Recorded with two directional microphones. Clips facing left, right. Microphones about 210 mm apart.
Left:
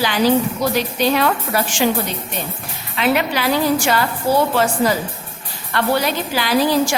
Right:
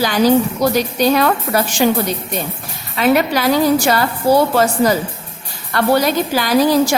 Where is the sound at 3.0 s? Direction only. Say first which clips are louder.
Right 4 dB; 45° right (ahead or behind).